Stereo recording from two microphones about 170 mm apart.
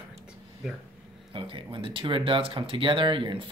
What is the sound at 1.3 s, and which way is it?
Speech, 30° right (ahead or behind).